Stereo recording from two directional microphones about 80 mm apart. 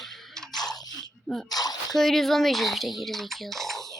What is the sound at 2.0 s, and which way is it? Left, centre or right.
Speech, centre.